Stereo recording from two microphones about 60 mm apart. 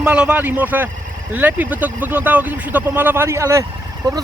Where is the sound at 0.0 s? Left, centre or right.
Centre; by 3.2 s right.